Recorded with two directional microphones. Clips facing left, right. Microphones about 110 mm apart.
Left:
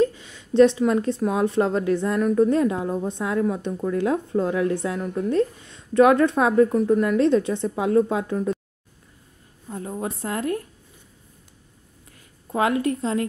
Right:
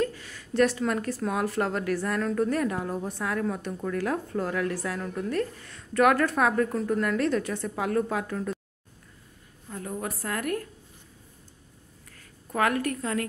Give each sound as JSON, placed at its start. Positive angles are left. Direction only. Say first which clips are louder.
{"t": 0.0, "sound": "a woman's voice", "louder": "left 7 dB", "side_deg": 20}
{"t": 9.7, "sound": "a woman's voice", "louder": "left 4 dB", "side_deg": 25}
{"t": 12.2, "sound": "a woman's voice", "louder": "left 3 dB", "side_deg": 20}